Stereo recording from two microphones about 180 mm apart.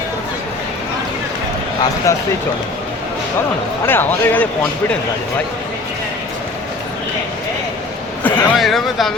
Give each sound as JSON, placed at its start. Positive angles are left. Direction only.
{"t": 2.1, "sound": "speech", "side_deg": 15}
{"t": 3.8, "sound": "speech", "side_deg": 10}
{"t": 8.2, "sound": "speech", "side_deg": 5}